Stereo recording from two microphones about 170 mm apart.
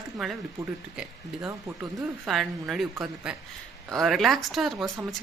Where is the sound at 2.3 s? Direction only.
Centre (ahead or behind).